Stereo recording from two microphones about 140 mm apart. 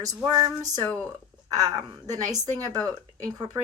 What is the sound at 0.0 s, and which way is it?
Speech, 25° right (ahead or behind).